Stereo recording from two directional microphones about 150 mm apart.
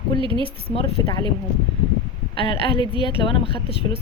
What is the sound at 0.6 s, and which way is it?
Speech, 40° left (ahead or behind).